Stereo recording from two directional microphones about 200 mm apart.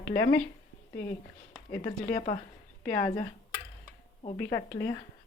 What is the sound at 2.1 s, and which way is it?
Speech, 40° left (ahead or behind).